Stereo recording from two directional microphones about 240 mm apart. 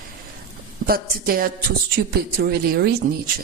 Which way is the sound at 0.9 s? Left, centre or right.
Right.